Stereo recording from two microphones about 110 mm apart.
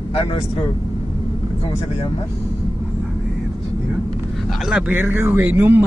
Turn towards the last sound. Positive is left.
turn(degrees=-20)  # may be behind; listen again after turning